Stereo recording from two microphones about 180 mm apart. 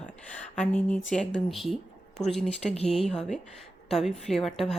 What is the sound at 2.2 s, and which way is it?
Speech, 20° left (ahead or behind).